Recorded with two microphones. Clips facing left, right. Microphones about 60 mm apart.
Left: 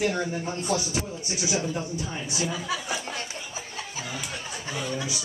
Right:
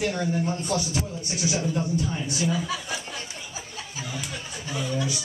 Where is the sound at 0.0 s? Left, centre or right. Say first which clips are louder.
Right 1 dB; left.